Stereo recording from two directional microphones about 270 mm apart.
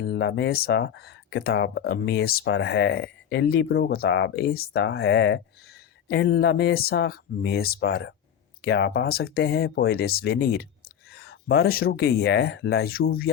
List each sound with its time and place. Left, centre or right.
0.0 s speech: left